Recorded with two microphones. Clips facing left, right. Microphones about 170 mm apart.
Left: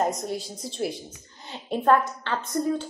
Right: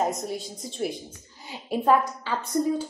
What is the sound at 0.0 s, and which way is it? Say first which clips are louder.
A woman's voice: left 1 dB; centre (ahead or behind).